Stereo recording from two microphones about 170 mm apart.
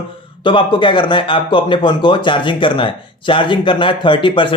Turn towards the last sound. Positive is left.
turn(degrees=30)  # may be behind; listen again after turning